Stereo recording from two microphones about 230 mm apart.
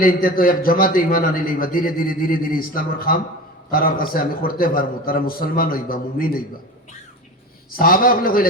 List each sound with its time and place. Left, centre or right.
0.0 s a man's voice: left
7.7 s a man's voice: left